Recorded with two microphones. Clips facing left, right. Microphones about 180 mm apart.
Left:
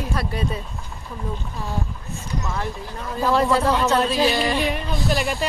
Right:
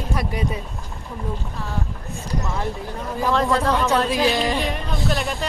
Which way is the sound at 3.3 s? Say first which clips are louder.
Left 1 dB; 10° left (ahead or behind).